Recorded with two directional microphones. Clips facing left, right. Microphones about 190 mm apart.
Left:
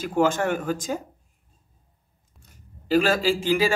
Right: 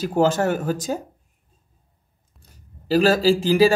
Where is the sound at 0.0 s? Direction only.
35° right (ahead or behind).